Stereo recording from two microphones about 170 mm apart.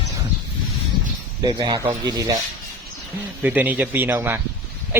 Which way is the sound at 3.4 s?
10° right (ahead or behind).